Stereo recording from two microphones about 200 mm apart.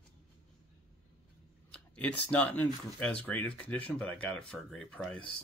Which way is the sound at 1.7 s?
5° left (ahead or behind).